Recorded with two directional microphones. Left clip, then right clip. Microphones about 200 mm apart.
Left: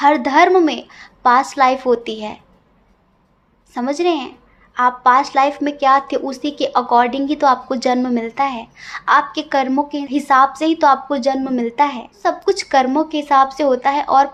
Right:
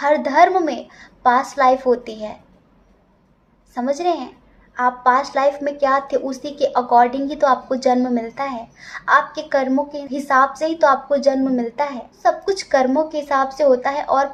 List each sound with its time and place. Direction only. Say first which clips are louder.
0.0 s a woman's voice: left 2 dB; 50° left (ahead or behind)
3.8 s a woman's voice: left 2 dB; 45° left (ahead or behind)